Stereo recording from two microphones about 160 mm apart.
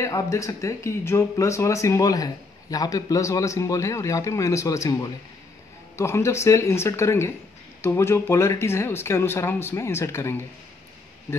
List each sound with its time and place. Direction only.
0.0 s speech: 20° left (ahead or behind)